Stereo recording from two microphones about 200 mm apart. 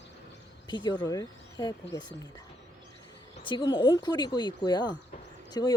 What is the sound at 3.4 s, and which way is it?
Speech, 25° left (ahead or behind).